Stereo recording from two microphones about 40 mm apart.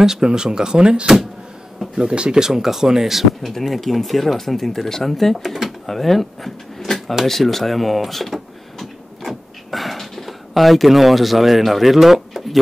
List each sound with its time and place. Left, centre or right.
0.0 s speech: centre
7.2 s a sound: centre
9.7 s speech: centre